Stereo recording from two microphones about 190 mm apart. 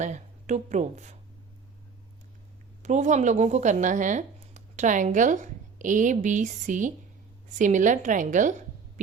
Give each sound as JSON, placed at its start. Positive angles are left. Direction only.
{"t": 0.0, "sound": "speech", "side_deg": -40}
{"t": 2.8, "sound": "speech", "side_deg": -40}